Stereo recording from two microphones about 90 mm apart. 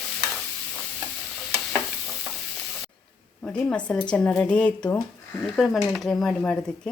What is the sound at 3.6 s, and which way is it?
Stir, 15° left (ahead or behind).